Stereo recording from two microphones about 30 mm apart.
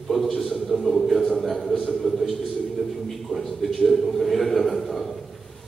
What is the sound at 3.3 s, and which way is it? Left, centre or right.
A man's voice, centre.